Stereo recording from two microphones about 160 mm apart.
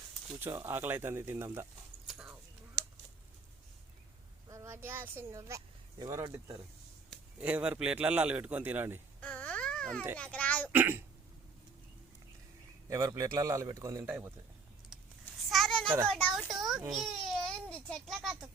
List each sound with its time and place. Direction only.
0.3 s a man's voice: 15° right (ahead or behind)
2.0 s a sound: 5° right (ahead or behind)
4.4 s a man's voice: 20° right (ahead or behind)
9.2 s baby cry: 10° left (ahead or behind)
10.3 s speech: 10° left (ahead or behind)
10.7 s a man's voice: 15° right (ahead or behind)
12.9 s a man's voice: 20° right (ahead or behind)
14.9 s a sound: 5° right (ahead or behind)
15.4 s children playing: centre (ahead or behind)
16.0 s a child's voice: centre (ahead or behind)
16.9 s a sound: centre (ahead or behind)